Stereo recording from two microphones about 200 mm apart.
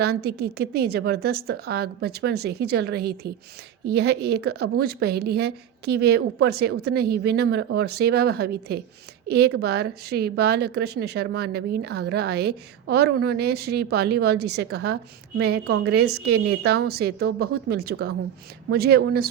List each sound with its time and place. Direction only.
0.0 s a woman's voice: 55° right (ahead or behind)